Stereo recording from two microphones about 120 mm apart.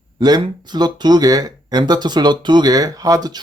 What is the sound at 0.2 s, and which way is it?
Speech, 35° right (ahead or behind).